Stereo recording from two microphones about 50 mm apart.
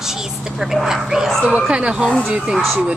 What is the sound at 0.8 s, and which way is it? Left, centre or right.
Speech, centre.